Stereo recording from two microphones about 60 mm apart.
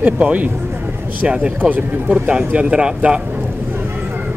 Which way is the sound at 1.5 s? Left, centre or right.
Right.